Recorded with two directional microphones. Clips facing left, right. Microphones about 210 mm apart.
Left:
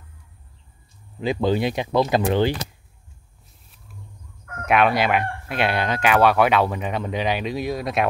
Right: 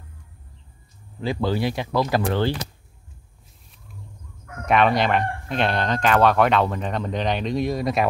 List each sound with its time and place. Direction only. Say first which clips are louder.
1.2 s speech: left 2 dB; 20° left (ahead or behind)
4.6 s speech: even; 5° left (ahead or behind)